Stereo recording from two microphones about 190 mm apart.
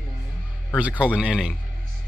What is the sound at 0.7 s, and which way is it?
Speech, 5° right (ahead or behind).